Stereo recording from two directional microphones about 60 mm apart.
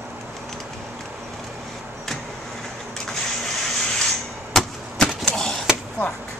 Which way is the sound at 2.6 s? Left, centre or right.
Centre.